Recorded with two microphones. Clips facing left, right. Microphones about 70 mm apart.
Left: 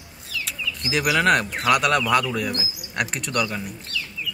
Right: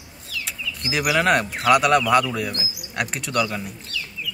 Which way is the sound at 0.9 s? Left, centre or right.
Centre.